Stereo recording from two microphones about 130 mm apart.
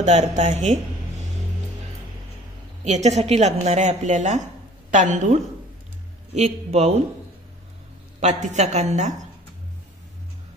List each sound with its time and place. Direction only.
0.0 s a woman's voice: 60° right (ahead or behind)
2.8 s a woman's voice: 60° right (ahead or behind)
6.3 s a woman's voice: 55° right (ahead or behind)
8.2 s a woman's voice: 65° right (ahead or behind)